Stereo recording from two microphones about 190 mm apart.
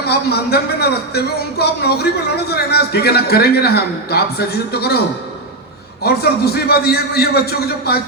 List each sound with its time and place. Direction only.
0.0 s a man's voice: 60° left (ahead or behind)
6.0 s a man's voice: 55° left (ahead or behind)